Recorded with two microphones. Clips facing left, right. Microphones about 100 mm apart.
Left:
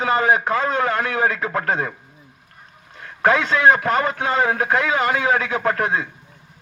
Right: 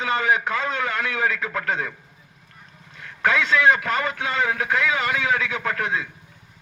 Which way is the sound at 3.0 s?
40° left (ahead or behind).